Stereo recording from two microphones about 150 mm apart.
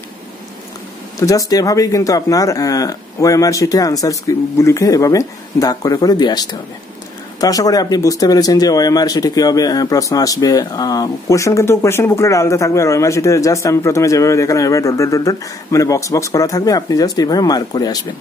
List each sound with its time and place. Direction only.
1.2 s speech: 25° left (ahead or behind)